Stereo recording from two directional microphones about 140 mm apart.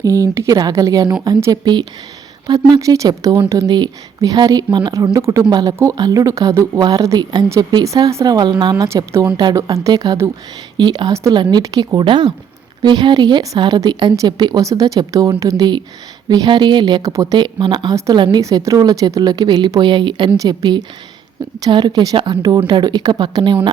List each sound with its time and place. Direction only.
0.0 s a woman's voice: 25° right (ahead or behind)
17.9 s a woman's voice: 20° right (ahead or behind)